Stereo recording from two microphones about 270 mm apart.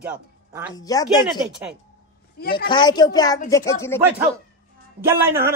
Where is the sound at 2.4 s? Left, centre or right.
Left.